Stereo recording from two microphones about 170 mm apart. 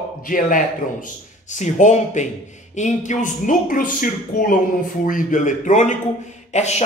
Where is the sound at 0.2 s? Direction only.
55° left (ahead or behind).